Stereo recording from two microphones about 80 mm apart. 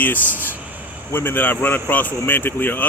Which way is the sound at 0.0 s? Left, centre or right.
Left.